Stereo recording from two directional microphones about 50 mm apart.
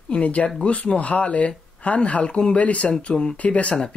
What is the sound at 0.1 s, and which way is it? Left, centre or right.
Speech, left.